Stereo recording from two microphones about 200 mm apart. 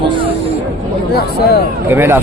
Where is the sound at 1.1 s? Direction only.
55° left (ahead or behind).